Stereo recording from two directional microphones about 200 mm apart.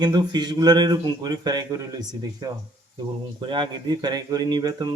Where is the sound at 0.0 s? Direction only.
20° right (ahead or behind).